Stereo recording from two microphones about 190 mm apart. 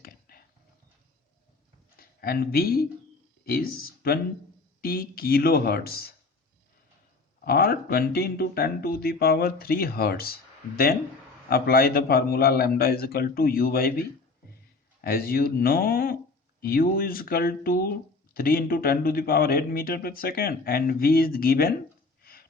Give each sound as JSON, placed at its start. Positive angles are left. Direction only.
{"t": 0.0, "sound": "a sound", "side_deg": 50}
{"t": 2.0, "sound": "speech", "side_deg": 50}
{"t": 7.4, "sound": "speech", "side_deg": 55}
{"t": 11.4, "sound": "speech", "side_deg": 55}
{"t": 15.0, "sound": "speech", "side_deg": 50}
{"t": 22.2, "sound": "a sound", "side_deg": 50}